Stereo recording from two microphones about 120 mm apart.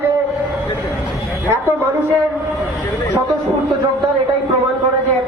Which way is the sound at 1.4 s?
15° right (ahead or behind).